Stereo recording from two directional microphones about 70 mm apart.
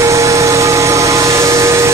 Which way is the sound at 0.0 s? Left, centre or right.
Right.